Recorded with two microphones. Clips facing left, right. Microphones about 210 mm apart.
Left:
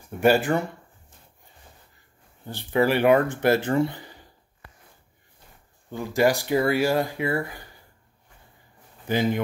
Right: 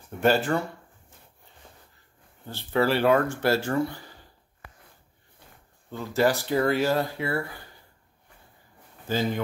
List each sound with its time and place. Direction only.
0.2 s speech: 10° left (ahead or behind)
2.4 s speech: 15° left (ahead or behind)
5.9 s speech: 15° left (ahead or behind)
9.0 s speech: 15° left (ahead or behind)